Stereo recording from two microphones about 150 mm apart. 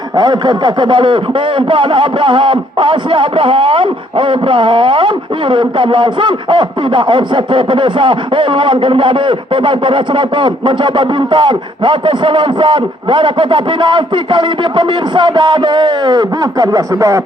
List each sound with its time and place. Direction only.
0.2 s speech: 30° right (ahead or behind)